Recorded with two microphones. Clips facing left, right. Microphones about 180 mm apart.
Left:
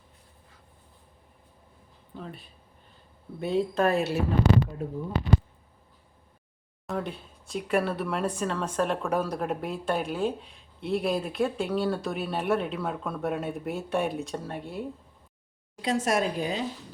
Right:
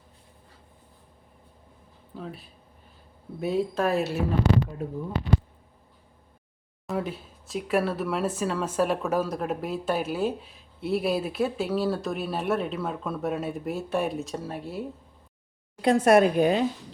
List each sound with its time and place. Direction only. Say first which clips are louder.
2.1 s speech: right 2 dB; centre (ahead or behind)
6.8 s speech: right 2 dB; 5° right (ahead or behind)
15.8 s speech: right 7 dB; 55° right (ahead or behind)